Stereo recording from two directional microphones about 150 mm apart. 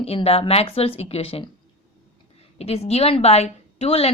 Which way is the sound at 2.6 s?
45° left (ahead or behind).